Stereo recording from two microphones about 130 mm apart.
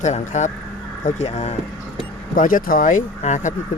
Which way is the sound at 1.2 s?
55° left (ahead or behind).